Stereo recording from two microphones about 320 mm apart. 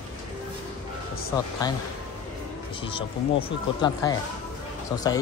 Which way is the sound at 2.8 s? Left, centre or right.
Centre.